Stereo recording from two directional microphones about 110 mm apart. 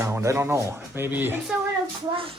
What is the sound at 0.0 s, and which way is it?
Speech, 25° right (ahead or behind).